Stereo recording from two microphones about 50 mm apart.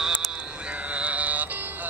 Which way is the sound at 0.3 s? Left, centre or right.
Right.